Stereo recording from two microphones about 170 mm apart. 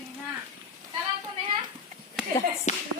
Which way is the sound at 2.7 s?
45° left (ahead or behind).